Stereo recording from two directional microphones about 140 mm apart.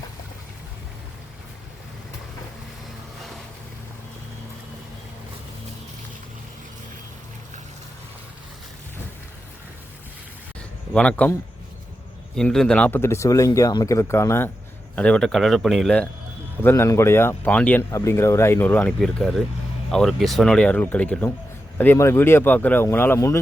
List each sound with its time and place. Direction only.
10.9 s speech: 10° left (ahead or behind)
12.4 s speech: 5° left (ahead or behind)
16.6 s speech: 20° left (ahead or behind)